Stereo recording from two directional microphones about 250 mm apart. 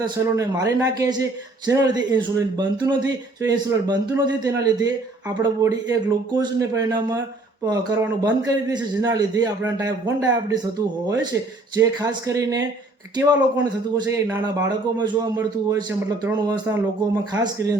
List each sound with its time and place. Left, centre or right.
0.0 s speech: centre
14.1 s speech: centre